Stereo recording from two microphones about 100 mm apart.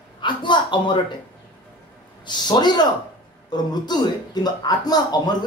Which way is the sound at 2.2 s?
45° left (ahead or behind).